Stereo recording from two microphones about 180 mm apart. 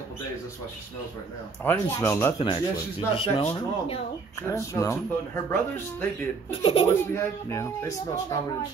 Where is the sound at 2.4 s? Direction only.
30° left (ahead or behind).